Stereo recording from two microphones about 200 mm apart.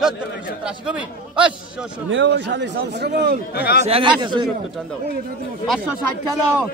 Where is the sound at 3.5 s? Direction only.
50° left (ahead or behind).